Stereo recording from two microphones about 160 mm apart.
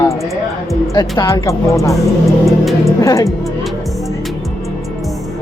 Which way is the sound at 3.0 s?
20° left (ahead or behind).